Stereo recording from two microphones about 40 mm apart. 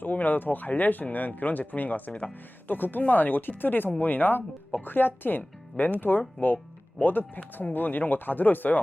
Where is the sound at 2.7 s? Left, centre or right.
Left.